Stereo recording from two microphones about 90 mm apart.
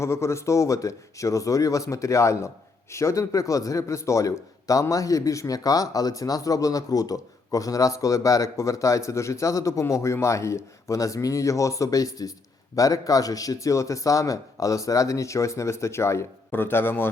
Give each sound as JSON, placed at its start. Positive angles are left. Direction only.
{"t": 0.0, "sound": "a man's voice", "side_deg": 30}